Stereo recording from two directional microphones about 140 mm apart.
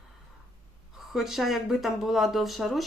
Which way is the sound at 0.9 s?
Centre (ahead or behind).